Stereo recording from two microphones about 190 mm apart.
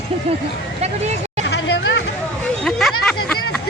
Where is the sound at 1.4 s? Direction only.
65° left (ahead or behind).